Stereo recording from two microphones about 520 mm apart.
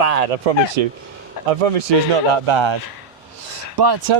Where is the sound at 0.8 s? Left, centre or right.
Right.